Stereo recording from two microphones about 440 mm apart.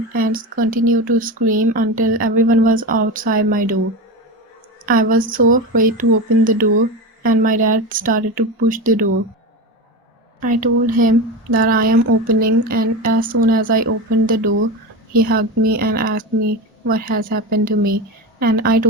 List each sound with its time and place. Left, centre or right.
0.1 s speech: centre
4.9 s speech: centre
10.4 s a woman's voice: centre